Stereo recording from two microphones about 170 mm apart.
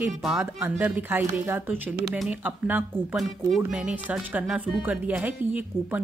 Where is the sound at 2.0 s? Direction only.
Centre (ahead or behind).